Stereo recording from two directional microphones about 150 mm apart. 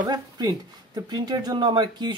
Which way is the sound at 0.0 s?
25° right (ahead or behind).